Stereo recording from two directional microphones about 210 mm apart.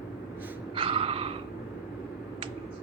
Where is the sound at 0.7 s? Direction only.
25° right (ahead or behind).